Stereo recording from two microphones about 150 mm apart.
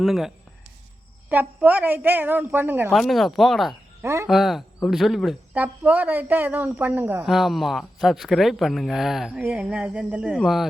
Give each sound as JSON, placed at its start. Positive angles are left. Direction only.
{"t": 0.0, "sound": "a woman's voice", "side_deg": 0}
{"t": 2.9, "sound": "speech", "side_deg": 0}
{"t": 4.0, "sound": "a woman's voice", "side_deg": -20}
{"t": 4.3, "sound": "a woman's voice", "side_deg": 0}
{"t": 7.3, "sound": "a woman's voice", "side_deg": 0}